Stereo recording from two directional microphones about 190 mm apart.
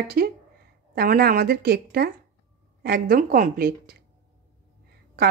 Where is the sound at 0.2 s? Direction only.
50° right (ahead or behind).